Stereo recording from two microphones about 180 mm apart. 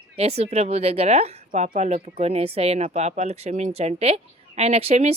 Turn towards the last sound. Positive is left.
turn(degrees=-35)  # may be behind; listen again after turning